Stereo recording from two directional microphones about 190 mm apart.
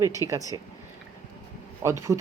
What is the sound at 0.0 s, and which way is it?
Speech, 15° right (ahead or behind).